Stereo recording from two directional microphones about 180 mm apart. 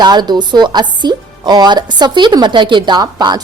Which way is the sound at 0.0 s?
25° right (ahead or behind).